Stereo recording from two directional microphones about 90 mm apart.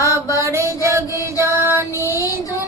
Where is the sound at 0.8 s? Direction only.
35° right (ahead or behind).